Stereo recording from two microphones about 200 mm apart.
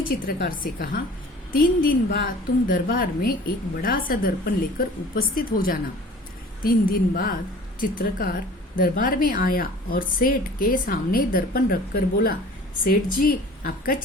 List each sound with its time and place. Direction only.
0.3 s a woman's voice: 45° left (ahead or behind)